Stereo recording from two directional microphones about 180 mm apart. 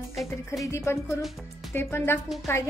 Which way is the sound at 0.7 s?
15° left (ahead or behind).